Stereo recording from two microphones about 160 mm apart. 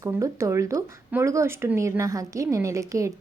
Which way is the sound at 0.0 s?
20° right (ahead or behind).